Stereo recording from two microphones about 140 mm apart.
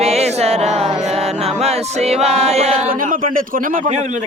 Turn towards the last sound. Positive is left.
turn(degrees=-70)  # may be behind; listen again after turning